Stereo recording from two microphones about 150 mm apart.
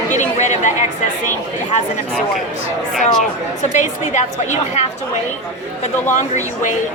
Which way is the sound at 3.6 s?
50° left (ahead or behind).